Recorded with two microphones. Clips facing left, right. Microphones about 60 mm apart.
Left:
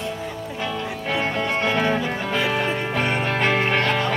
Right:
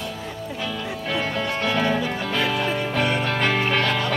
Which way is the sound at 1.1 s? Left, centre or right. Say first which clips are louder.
Left 2 dB; left.